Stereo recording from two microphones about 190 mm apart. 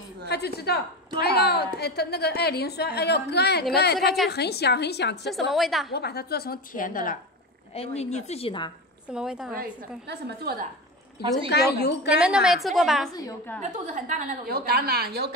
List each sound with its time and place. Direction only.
0.3 s a woman's voice: 60° left (ahead or behind)
5.3 s a woman's voice: centre (ahead or behind)
5.9 s a woman's voice: 55° left (ahead or behind)
7.7 s a woman's voice: 30° left (ahead or behind)
9.1 s a woman's voice: 5° right (ahead or behind)
10.0 s a woman's voice: 60° right (ahead or behind)
11.4 s a woman's voice: 60° left (ahead or behind)
12.1 s a woman's voice: 5° right (ahead or behind)
13.6 s a woman's voice: 40° right (ahead or behind)